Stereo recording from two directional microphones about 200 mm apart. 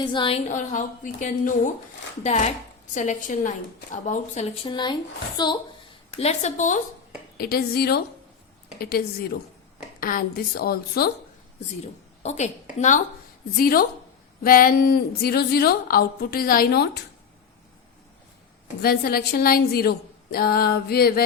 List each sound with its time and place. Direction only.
0.0 s a woman's voice: 25° left (ahead or behind)
0.4 s a woman's voice: 40° left (ahead or behind); by 5.5 s 20° left (ahead or behind)
6.1 s a woman's voice: 30° left (ahead or behind)
7.3 s a woman's voice: 50° left (ahead or behind)
12.2 s a woman's voice: 35° left (ahead or behind)
13.6 s a woman's voice: 45° left (ahead or behind)
18.8 s a woman's voice: 50° left (ahead or behind)